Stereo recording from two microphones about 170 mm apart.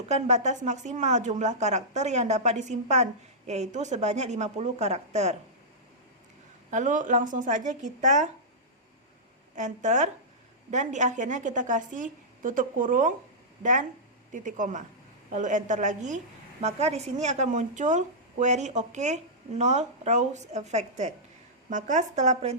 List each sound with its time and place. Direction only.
0.1 s a woman's voice: 40° right (ahead or behind)
6.7 s a woman's voice: 45° right (ahead or behind)
9.6 s a woman's voice: 45° right (ahead or behind)